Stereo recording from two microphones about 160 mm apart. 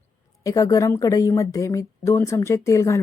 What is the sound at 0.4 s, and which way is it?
Speech, 20° left (ahead or behind).